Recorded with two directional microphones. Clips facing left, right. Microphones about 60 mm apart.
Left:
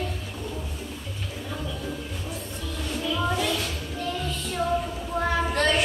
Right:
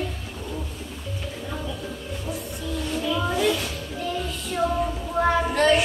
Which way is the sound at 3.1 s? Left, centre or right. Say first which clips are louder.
Right 3 dB; centre.